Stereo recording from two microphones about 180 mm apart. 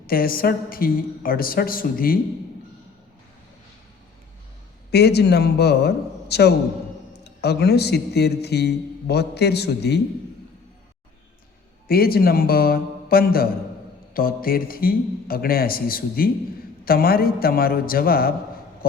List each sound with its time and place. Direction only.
0.1 s a woman's voice: 55° left (ahead or behind)
4.9 s a man's voice: 65° left (ahead or behind)
11.9 s a man's voice: 55° left (ahead or behind)